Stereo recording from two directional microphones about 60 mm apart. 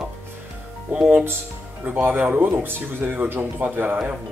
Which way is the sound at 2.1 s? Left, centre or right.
Right.